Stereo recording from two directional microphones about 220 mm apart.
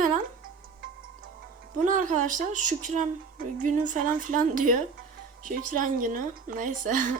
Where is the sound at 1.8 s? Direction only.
35° right (ahead or behind).